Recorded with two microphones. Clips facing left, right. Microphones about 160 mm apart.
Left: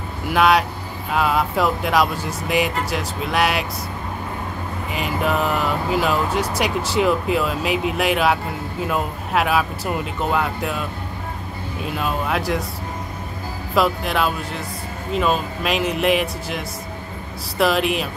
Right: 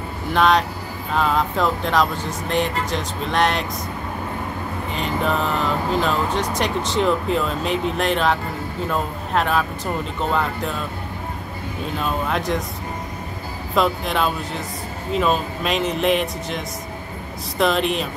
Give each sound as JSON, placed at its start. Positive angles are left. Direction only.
{"t": 0.3, "sound": "speech", "side_deg": 10}
{"t": 4.9, "sound": "speech", "side_deg": 10}
{"t": 11.8, "sound": "speech", "side_deg": 5}
{"t": 13.7, "sound": "speech", "side_deg": 5}